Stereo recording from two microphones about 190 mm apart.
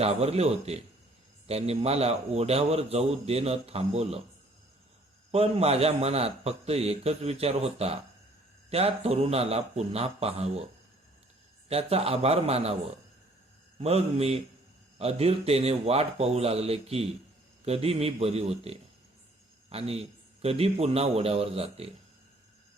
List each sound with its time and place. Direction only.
0.0 s a man's voice: 35° right (ahead or behind)
5.3 s a man's voice: 30° right (ahead or behind)
11.7 s a man's voice: 30° right (ahead or behind)
13.7 s a man's voice: 30° right (ahead or behind)